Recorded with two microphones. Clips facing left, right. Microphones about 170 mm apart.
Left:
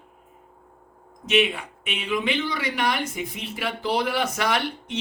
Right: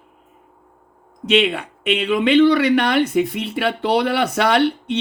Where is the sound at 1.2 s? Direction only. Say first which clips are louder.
Right 5 dB; 65° right (ahead or behind).